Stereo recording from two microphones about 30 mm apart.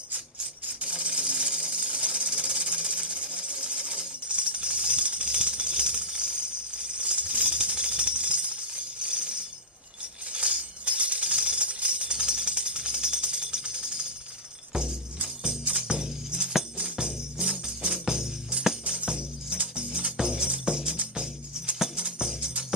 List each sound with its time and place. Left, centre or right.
0.7 s a sound: right
2.0 s jackhammer: right
4.3 s tambourine: right
14.7 s music: right
19.0 s music: right